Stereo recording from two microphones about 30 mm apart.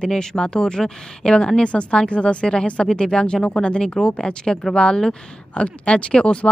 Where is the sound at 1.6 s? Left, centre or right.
Left.